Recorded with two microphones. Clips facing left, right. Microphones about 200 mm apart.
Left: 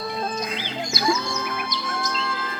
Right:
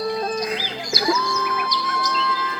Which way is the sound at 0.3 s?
25° left (ahead or behind).